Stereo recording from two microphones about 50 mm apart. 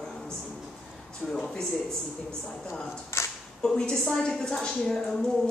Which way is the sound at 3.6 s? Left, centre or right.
Centre.